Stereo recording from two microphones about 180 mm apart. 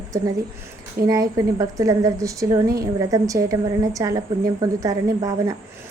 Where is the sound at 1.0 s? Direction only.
20° right (ahead or behind).